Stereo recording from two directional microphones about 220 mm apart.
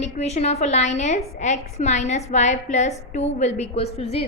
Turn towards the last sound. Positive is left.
turn(degrees=30)  # may be behind; listen again after turning